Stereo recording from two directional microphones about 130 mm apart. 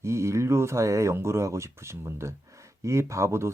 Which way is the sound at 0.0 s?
20° right (ahead or behind).